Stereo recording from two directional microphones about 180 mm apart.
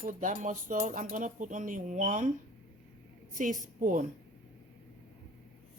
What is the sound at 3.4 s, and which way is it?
Speech, 45° right (ahead or behind).